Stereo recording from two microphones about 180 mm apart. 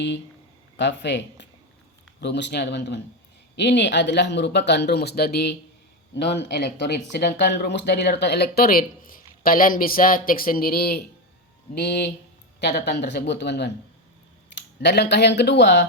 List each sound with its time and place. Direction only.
0.8 s speech: 75° left (ahead or behind)